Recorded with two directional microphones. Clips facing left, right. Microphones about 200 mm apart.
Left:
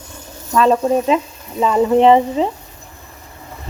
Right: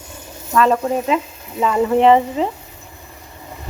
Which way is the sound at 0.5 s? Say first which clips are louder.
Left 2 dB; 25° left (ahead or behind).